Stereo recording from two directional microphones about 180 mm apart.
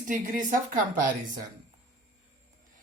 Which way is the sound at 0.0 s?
45° right (ahead or behind).